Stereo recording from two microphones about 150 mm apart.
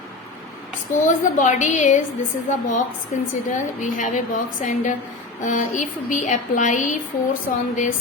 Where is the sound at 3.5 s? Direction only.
55° left (ahead or behind).